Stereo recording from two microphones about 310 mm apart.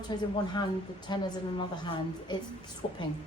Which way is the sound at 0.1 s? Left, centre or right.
Centre.